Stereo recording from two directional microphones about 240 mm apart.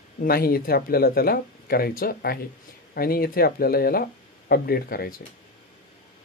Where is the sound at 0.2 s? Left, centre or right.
Left.